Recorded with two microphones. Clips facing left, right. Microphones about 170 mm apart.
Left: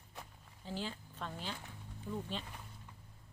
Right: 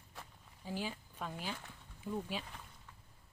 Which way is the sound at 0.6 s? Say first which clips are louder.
Right 1 dB; 10° right (ahead or behind).